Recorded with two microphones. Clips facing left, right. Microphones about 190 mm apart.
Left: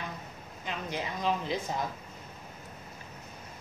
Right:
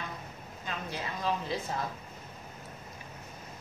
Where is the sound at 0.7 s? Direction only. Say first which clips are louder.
Left 2 dB; 15° left (ahead or behind).